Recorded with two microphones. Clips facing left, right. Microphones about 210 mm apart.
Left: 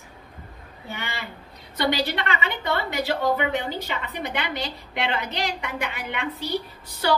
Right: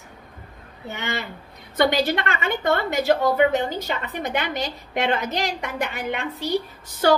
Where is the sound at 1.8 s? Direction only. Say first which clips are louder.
Right 4 dB; 50° right (ahead or behind).